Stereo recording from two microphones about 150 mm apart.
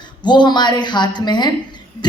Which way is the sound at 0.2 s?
30° left (ahead or behind).